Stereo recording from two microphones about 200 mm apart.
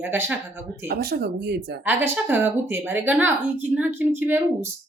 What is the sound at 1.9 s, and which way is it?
Speech, 10° right (ahead or behind).